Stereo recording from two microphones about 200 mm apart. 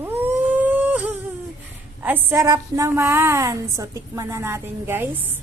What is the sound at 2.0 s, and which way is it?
A woman's voice, 10° right (ahead or behind).